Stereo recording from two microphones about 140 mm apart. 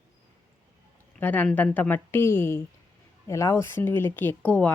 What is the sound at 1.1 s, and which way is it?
Speech, 15° left (ahead or behind).